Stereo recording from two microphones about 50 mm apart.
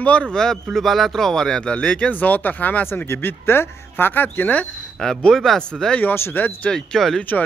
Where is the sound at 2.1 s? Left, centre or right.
Left.